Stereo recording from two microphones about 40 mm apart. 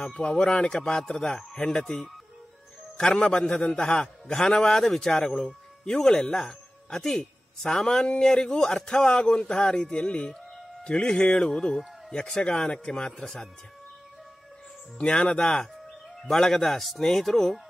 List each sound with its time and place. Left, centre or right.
0.0 s a man's voice: left
11.5 s a man's voice: centre
15.0 s a man's voice: left
16.2 s a man's voice: centre